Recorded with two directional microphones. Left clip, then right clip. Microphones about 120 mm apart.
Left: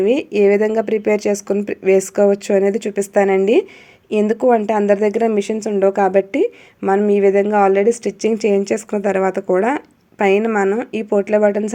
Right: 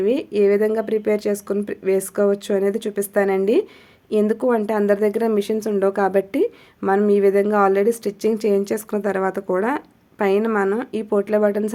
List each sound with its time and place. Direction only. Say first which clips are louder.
0.0 s speech: left 4 dB; 20° left (ahead or behind)